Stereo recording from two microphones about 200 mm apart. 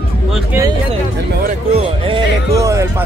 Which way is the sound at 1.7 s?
25° right (ahead or behind).